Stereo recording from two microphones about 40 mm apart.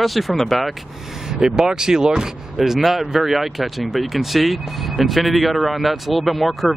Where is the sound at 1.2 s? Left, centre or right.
Centre.